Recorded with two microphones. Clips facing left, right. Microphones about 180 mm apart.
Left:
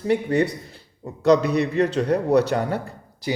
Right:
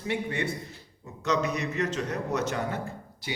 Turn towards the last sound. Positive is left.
turn(degrees=35)  # may be behind; listen again after turning